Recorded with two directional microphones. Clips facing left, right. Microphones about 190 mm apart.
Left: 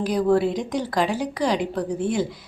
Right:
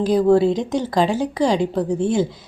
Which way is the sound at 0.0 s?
25° right (ahead or behind).